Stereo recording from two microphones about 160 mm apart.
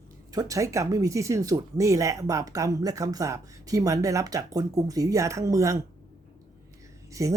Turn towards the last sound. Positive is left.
turn(degrees=-20)  # may be behind; listen again after turning